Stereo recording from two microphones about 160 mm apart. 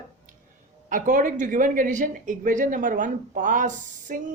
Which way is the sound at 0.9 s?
55° right (ahead or behind).